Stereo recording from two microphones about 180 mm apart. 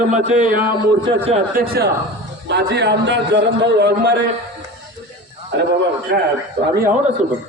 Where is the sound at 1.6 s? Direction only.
55° right (ahead or behind).